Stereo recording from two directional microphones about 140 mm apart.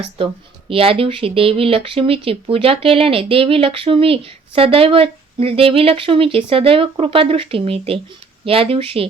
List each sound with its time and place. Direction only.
0.2 s speech: 40° right (ahead or behind)